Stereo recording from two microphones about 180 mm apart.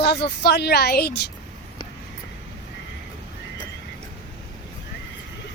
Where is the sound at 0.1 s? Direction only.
70° left (ahead or behind).